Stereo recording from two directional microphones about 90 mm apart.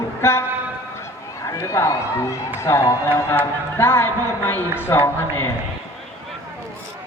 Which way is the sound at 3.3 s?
20° left (ahead or behind).